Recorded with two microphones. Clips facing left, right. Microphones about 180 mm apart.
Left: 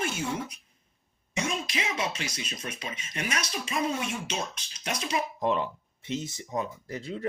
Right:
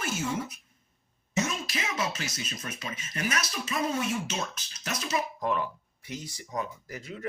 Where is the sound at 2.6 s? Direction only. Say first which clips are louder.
Left 1 dB; 25° left (ahead or behind).